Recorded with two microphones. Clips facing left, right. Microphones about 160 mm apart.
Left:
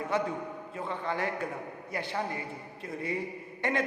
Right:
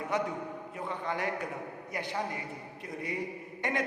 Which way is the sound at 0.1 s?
20° right (ahead or behind).